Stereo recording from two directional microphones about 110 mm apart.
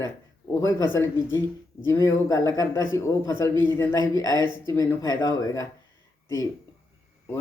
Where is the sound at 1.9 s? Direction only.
25° left (ahead or behind).